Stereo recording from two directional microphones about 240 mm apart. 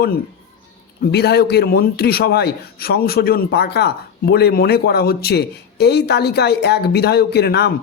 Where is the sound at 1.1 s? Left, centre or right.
Left.